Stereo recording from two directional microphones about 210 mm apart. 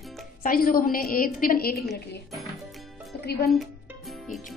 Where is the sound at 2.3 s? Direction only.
Centre (ahead or behind).